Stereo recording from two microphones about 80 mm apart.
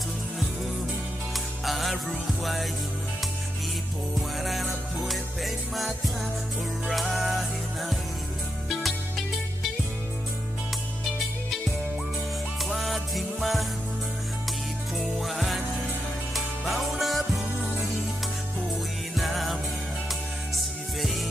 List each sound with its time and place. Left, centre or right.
1.3 s music: centre
4.4 s music: centre
12.6 s music: centre
15.0 s music: centre
19.1 s music: centre
21.0 s music: centre